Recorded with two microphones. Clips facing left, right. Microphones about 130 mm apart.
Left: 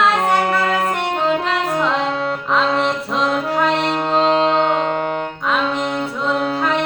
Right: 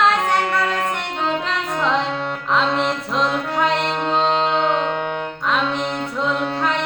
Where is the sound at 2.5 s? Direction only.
Centre (ahead or behind).